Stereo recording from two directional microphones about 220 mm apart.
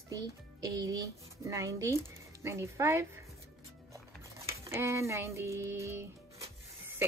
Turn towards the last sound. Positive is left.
turn(degrees=-10)  # may be behind; listen again after turning